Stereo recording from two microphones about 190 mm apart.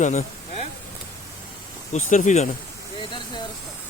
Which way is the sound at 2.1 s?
40° left (ahead or behind).